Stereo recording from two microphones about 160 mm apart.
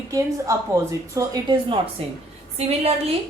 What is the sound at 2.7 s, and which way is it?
Speech, 40° right (ahead or behind).